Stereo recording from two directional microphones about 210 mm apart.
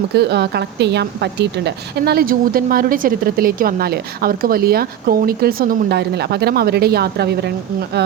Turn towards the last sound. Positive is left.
turn(degrees=-50)  # may be behind; listen again after turning